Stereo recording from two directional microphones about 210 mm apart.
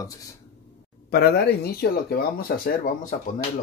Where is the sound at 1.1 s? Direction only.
50° left (ahead or behind).